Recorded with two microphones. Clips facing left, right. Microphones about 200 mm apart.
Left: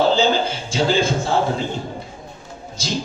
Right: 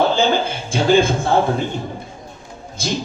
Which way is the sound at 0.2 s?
55° right (ahead or behind).